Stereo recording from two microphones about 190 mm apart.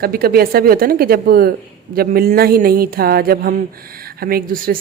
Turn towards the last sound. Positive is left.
turn(degrees=-50)  # may be behind; listen again after turning